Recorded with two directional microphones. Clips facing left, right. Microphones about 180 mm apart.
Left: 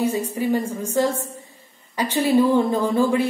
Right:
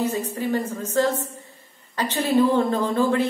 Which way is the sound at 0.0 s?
10° left (ahead or behind).